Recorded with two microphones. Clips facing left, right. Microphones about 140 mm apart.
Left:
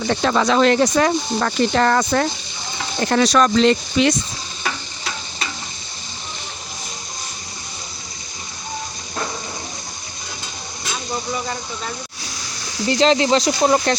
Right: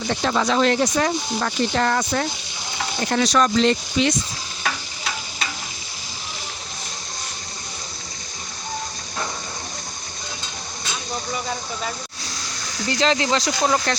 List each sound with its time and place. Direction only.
0.1 s speech: 90° left
12.8 s speech: 25° left (ahead or behind)